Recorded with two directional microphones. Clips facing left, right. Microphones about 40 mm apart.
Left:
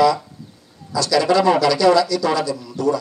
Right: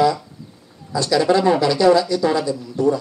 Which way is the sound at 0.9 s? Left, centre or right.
Right.